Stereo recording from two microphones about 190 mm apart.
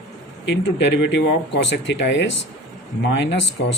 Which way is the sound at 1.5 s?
65° left (ahead or behind).